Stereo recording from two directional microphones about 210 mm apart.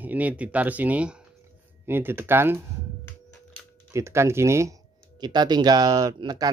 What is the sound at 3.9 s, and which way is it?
Speech, 15° right (ahead or behind).